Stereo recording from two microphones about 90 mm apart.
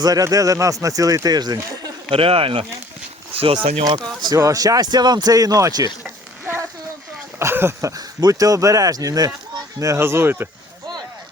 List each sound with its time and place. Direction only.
0.0 s speech: 45° right (ahead or behind)
2.0 s speech: 90° right
4.4 s speech: 40° right (ahead or behind)
7.3 s speech: 25° right (ahead or behind); by 9.3 s 45° right (ahead or behind)
9.8 s speech: 35° right (ahead or behind)